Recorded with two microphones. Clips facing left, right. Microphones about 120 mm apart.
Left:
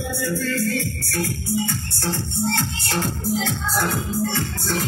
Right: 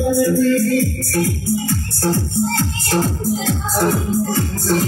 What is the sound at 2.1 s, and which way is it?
Speech, 40° right (ahead or behind).